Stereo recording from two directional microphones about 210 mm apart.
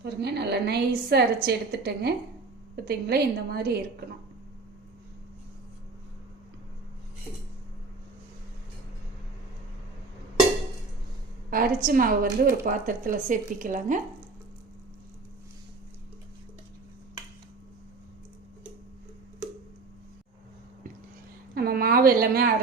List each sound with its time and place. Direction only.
0.0 s a woman's voice: 50° right (ahead or behind)
11.5 s a woman's voice: 45° right (ahead or behind)
21.5 s a sound: 45° right (ahead or behind)